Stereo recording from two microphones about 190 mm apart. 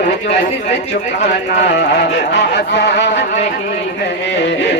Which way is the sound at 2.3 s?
60° left (ahead or behind).